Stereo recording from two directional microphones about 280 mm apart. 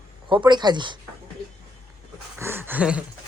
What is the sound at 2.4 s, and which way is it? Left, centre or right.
Speech, centre.